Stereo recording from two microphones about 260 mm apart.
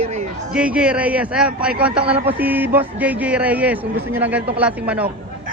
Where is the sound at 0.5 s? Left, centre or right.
Centre.